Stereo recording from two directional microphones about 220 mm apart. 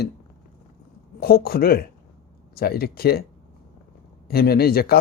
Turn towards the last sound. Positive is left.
turn(degrees=45)  # may be behind; listen again after turning